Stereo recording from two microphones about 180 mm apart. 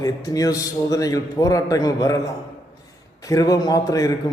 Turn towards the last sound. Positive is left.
turn(degrees=20)  # may be behind; listen again after turning